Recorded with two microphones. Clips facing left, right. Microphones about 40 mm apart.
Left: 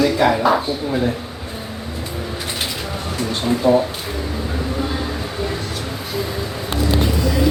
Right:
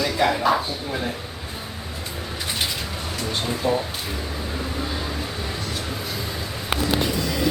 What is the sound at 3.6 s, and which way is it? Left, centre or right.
Speech, centre.